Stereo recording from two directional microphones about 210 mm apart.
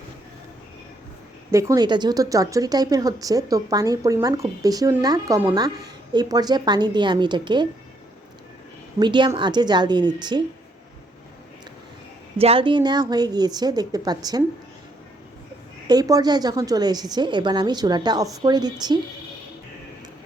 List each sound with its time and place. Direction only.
1.5 s speech: 15° right (ahead or behind)
9.0 s a woman's voice: 20° right (ahead or behind)
12.4 s a woman's voice: 25° right (ahead or behind)
15.9 s a woman's voice: 20° right (ahead or behind)